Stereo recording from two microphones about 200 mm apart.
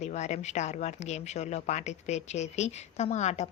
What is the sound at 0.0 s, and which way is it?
Speech, 35° left (ahead or behind).